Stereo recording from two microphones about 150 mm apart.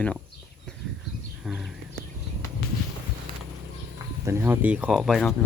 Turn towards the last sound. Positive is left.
turn(degrees=0)  # may be behind; listen again after turning